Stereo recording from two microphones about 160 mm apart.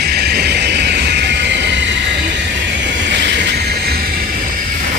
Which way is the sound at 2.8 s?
90° right.